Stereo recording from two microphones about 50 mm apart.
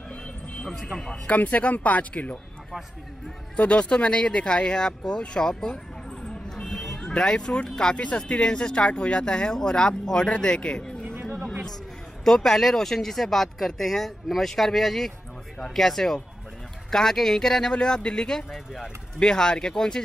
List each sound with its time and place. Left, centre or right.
0.1 s music: left
0.7 s speech: centre
1.2 s speech: left
3.5 s speech: left
6.2 s vehicle: centre
7.0 s speech: centre
12.3 s speech: centre